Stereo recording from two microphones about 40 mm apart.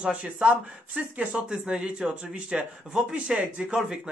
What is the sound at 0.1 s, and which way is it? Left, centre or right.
Speech, right.